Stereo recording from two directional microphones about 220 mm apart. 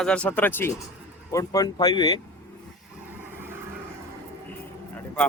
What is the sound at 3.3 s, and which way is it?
Vehicle, 10° right (ahead or behind).